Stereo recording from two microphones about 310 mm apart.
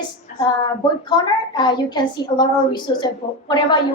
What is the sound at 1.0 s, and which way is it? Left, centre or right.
A woman's voice, centre.